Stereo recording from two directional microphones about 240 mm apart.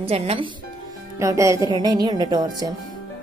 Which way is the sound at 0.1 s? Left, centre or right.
Right.